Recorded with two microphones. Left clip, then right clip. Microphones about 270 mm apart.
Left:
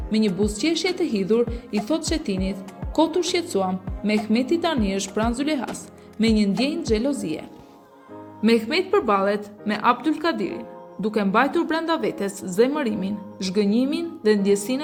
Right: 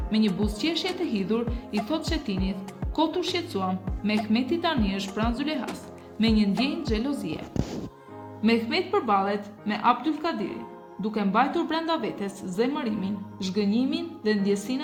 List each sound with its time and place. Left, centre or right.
0.1 s a woman's voice: centre